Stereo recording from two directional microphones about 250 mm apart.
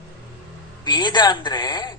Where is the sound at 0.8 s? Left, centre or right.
Centre.